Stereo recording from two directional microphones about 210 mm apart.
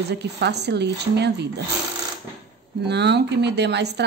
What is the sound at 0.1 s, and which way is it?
Speech, 55° right (ahead or behind).